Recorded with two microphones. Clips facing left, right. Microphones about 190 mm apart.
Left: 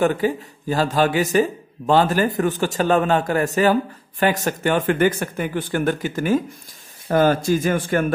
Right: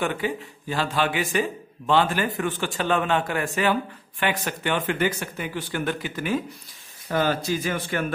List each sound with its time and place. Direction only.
0.0 s speech: 40° left (ahead or behind)